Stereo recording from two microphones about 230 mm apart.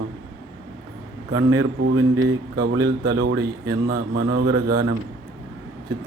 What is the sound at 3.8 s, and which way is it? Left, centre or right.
Speech, right.